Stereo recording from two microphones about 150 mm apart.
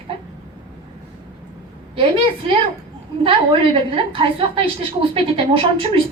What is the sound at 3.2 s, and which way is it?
A woman's voice, 35° right (ahead or behind).